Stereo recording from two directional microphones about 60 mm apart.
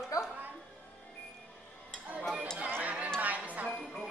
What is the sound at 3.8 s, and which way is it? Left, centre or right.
Music, centre.